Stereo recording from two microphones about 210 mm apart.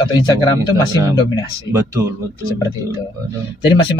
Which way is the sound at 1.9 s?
15° right (ahead or behind).